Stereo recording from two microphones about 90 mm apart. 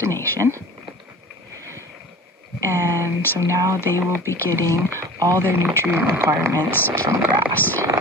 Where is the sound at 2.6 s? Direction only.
35° right (ahead or behind).